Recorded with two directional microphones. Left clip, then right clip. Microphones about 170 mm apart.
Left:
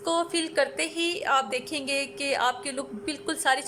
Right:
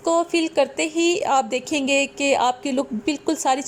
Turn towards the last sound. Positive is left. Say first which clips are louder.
# right 4 dB
turn(degrees=-15)  # may be behind; listen again after turning